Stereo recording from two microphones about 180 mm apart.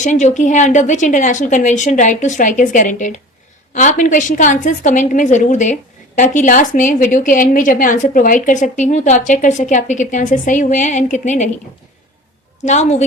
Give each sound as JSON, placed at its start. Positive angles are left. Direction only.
{"t": 0.0, "sound": "a woman's voice", "side_deg": 40}
{"t": 12.6, "sound": "a woman's voice", "side_deg": 40}